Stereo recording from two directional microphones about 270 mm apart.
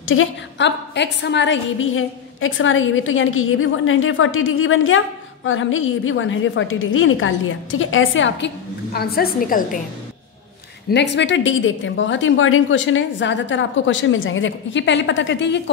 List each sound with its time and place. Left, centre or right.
0.0 s a woman's voice: left
10.9 s a woman's voice: left